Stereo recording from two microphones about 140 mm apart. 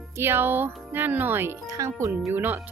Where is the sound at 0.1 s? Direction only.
15° right (ahead or behind).